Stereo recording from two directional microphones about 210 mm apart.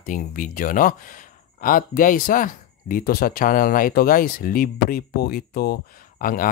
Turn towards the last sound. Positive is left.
turn(degrees=40)  # may be behind; listen again after turning